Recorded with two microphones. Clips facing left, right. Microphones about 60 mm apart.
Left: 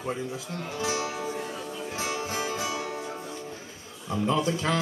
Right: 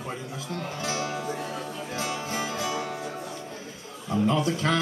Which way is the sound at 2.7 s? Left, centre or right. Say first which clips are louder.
Right 2 dB; right.